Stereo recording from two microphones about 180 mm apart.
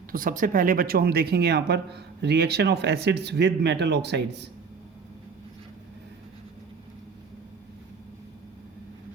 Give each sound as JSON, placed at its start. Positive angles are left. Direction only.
{"t": 0.1, "sound": "speech", "side_deg": -50}